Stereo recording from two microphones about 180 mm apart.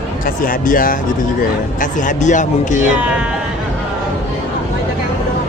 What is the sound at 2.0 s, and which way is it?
Speech, 45° left (ahead or behind).